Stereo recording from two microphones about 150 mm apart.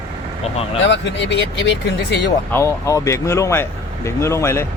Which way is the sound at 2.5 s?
20° left (ahead or behind).